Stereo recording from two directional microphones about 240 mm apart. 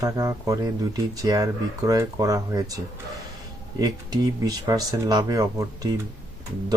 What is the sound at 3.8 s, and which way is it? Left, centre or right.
Speech, centre.